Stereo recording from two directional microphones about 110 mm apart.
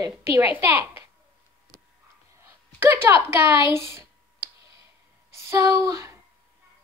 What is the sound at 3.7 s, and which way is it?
Speech, 25° right (ahead or behind).